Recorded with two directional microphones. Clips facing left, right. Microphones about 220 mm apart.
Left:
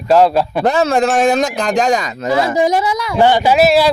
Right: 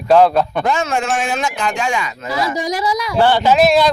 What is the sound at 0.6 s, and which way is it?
Speech, 35° left (ahead or behind).